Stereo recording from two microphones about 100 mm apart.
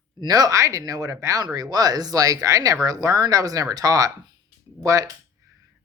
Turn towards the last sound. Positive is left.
turn(degrees=-35)  # may be behind; listen again after turning